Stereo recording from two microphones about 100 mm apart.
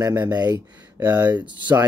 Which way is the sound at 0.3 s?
40° right (ahead or behind).